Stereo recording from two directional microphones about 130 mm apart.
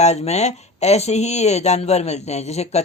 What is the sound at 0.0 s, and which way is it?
Speech, 55° left (ahead or behind).